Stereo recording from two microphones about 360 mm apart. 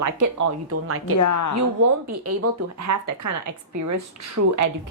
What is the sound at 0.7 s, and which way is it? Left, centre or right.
Speech, right.